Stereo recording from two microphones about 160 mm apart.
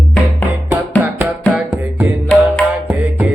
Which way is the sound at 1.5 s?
10° right (ahead or behind).